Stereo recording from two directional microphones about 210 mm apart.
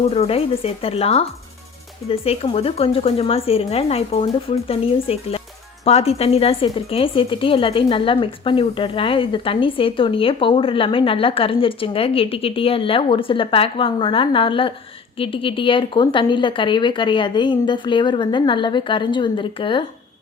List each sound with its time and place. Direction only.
0.1 s a woman's voice: 30° left (ahead or behind)